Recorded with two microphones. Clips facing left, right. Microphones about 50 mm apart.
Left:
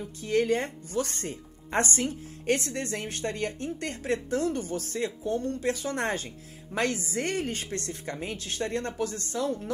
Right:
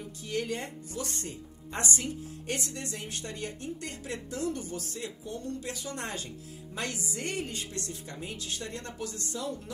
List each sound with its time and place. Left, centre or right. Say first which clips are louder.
0.2 s speech: left 8 dB; left